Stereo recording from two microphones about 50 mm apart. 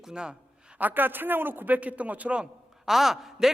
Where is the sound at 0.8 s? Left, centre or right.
Right.